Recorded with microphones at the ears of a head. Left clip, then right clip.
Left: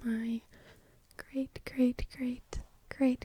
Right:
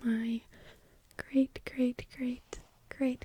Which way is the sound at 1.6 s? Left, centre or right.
Centre.